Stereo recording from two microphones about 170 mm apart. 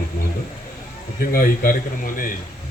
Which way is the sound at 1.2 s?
55° left (ahead or behind).